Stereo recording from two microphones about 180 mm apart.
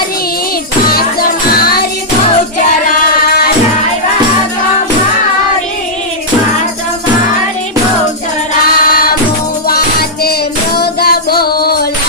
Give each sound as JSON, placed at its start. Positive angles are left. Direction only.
{"t": 1.5, "sound": "music", "side_deg": 60}
{"t": 8.8, "sound": "music", "side_deg": 55}